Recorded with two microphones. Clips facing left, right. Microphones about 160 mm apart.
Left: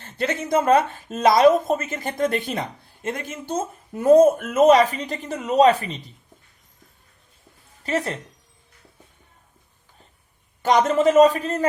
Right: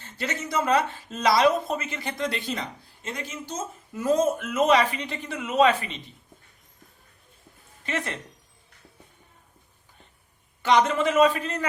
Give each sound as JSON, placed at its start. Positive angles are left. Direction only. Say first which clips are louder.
{"t": 0.0, "sound": "speech", "louder": "left 6 dB", "side_deg": 55}
{"t": 7.9, "sound": "a man's voice", "louder": "left 6 dB", "side_deg": 35}
{"t": 10.6, "sound": "a man's voice", "louder": "left 3 dB", "side_deg": 45}